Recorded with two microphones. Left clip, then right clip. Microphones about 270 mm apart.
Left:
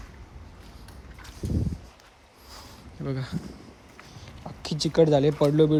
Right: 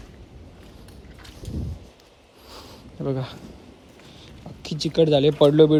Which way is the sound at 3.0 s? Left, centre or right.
Right.